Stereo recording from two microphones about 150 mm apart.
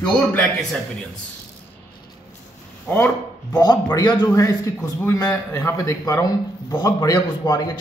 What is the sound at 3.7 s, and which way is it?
Speech, 30° left (ahead or behind).